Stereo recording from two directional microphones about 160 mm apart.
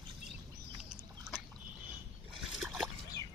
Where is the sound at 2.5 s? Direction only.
Centre (ahead or behind).